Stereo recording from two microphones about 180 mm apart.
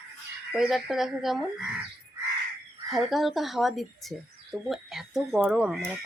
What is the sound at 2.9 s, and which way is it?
Speech, centre (ahead or behind).